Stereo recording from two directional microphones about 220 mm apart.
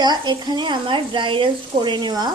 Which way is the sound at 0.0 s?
20° right (ahead or behind).